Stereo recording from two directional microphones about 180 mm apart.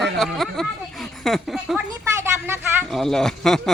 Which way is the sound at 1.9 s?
15° right (ahead or behind).